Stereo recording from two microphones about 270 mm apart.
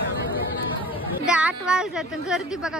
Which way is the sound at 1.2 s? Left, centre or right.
Centre.